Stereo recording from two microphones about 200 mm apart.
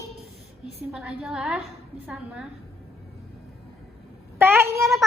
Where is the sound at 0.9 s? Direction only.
5° right (ahead or behind).